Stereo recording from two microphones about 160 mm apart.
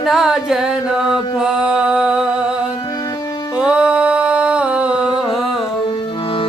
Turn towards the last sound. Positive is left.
turn(degrees=-5)  # may be behind; listen again after turning